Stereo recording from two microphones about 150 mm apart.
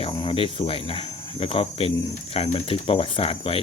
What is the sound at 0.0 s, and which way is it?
Speech, 35° left (ahead or behind).